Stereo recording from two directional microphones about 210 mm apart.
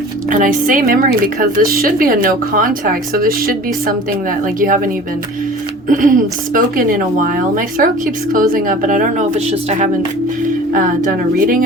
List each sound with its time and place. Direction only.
0.3 s a woman's voice: 40° right (ahead or behind)
5.9 s a woman's voice: 40° right (ahead or behind)